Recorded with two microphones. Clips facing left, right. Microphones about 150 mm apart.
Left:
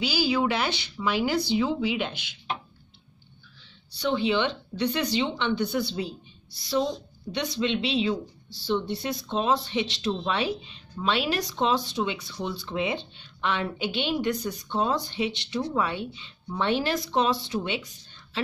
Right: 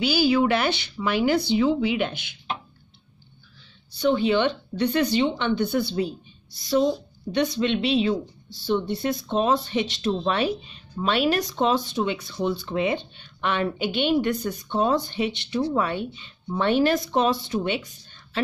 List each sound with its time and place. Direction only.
0.0 s speech: 55° right (ahead or behind)
3.9 s speech: 50° right (ahead or behind)